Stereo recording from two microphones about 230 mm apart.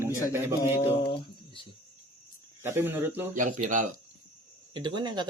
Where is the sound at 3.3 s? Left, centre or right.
Right.